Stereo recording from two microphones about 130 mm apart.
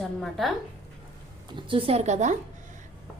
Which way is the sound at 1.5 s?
40° right (ahead or behind).